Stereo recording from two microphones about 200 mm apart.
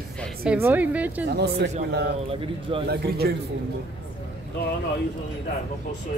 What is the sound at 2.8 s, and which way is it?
Speech, 55° right (ahead or behind).